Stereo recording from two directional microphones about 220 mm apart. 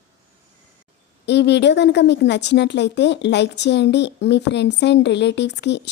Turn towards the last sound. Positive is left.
turn(degrees=50)  # may be behind; listen again after turning